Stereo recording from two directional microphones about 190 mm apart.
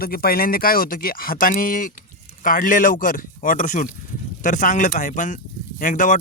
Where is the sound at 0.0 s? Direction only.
50° left (ahead or behind).